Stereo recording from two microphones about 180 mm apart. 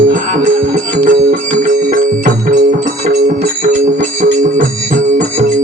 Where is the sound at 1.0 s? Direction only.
50° right (ahead or behind).